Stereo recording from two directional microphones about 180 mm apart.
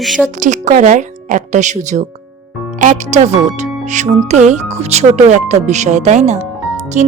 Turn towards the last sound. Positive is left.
turn(degrees=-45)  # may be behind; listen again after turning